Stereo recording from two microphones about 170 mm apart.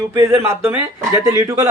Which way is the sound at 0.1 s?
15° right (ahead or behind).